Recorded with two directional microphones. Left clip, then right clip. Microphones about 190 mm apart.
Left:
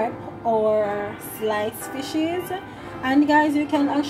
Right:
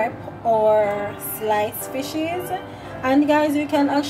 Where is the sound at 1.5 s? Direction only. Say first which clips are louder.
Right 5 dB; 20° right (ahead or behind).